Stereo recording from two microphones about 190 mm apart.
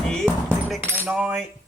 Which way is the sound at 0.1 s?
5° left (ahead or behind).